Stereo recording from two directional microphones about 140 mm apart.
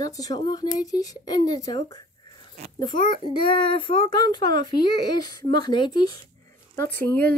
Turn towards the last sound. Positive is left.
turn(degrees=10)  # may be behind; listen again after turning